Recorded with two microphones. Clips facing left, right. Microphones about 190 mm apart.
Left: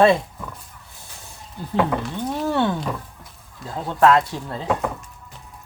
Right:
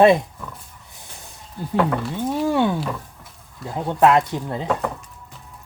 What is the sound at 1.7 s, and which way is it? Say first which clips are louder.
Speech: right 1 dB; centre (ahead or behind).